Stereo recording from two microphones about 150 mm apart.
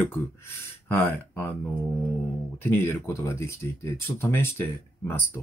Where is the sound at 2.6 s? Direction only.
15° left (ahead or behind).